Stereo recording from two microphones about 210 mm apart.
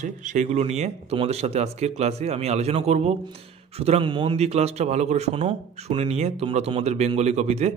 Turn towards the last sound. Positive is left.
turn(degrees=-30)  # may be behind; listen again after turning